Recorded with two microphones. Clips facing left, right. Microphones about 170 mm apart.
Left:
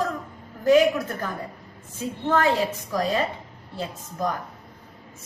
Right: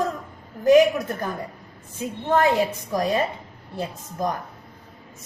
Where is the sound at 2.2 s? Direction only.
20° right (ahead or behind).